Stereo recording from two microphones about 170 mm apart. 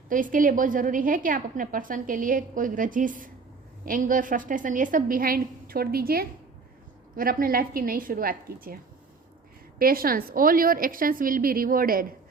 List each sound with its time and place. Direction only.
0.1 s a woman's voice: 50° right (ahead or behind)